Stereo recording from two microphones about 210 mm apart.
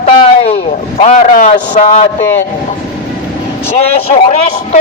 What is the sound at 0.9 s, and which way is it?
A man's voice, 30° left (ahead or behind).